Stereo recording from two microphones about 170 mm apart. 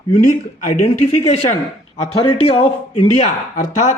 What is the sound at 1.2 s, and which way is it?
A man's voice, 35° left (ahead or behind).